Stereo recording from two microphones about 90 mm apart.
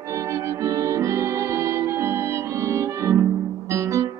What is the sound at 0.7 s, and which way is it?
Music, 35° right (ahead or behind).